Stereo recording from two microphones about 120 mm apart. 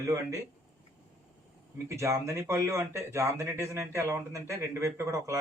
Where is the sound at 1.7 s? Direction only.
25° right (ahead or behind).